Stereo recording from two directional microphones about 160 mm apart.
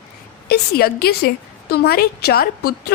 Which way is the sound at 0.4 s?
80° left.